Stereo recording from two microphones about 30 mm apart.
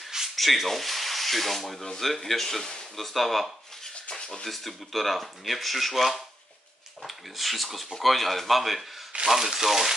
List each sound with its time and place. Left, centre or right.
0.4 s speech: centre
0.7 s sanding: centre
2.0 s speech: centre
2.6 s speech: left
3.0 s speech: centre
4.5 s speech: centre